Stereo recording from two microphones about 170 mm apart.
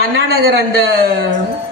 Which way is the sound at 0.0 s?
70° right (ahead or behind).